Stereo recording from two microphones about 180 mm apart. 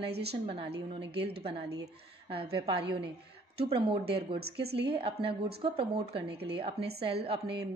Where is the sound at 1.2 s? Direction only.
30° right (ahead or behind).